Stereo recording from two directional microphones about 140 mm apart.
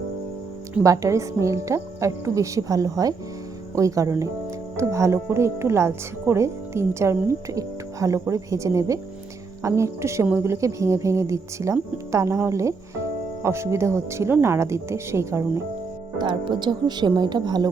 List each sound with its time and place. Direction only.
0.7 s speech: 20° right (ahead or behind)
16.1 s speech: 35° right (ahead or behind)